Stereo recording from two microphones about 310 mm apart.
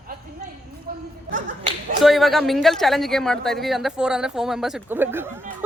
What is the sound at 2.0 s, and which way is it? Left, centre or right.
Speech, centre.